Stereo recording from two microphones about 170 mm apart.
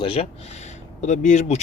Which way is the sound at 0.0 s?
35° left (ahead or behind).